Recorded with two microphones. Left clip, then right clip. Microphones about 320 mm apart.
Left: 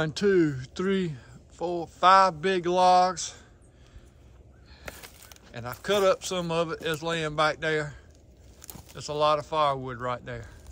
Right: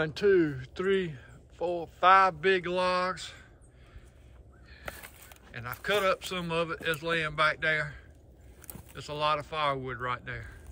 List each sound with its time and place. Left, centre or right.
0.0 s speech: left
5.5 s speech: centre